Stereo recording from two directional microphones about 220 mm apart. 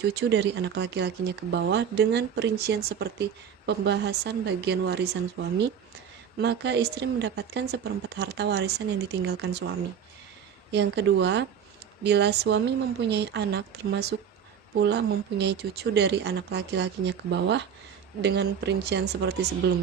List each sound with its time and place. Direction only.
0.1 s speech: 50° right (ahead or behind)
6.4 s speech: 50° right (ahead or behind)